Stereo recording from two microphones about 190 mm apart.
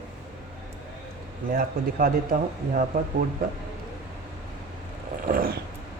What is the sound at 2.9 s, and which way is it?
Cat, 50° right (ahead or behind).